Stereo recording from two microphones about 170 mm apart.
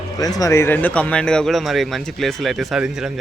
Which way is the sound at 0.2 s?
20° left (ahead or behind).